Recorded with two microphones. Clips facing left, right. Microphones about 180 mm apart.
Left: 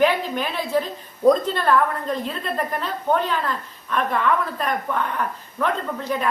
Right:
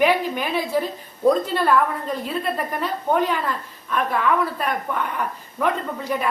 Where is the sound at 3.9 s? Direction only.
5° right (ahead or behind).